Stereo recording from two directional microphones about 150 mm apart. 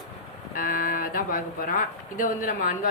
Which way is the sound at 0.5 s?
70° left (ahead or behind).